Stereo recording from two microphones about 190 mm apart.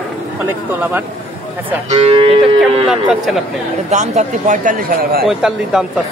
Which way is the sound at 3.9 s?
40° right (ahead or behind).